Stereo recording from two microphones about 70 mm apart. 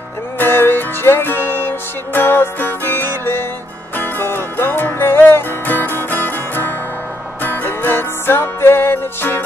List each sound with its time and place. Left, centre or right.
0.4 s music: left